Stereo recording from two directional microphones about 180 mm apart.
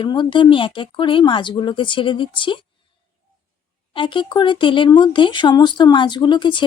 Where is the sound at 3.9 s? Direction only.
25° left (ahead or behind).